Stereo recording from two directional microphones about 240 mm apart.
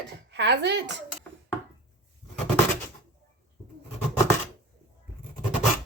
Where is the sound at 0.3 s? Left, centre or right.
Right.